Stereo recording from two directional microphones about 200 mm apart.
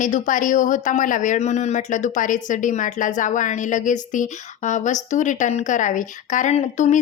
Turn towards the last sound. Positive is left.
turn(degrees=35)  # may be behind; listen again after turning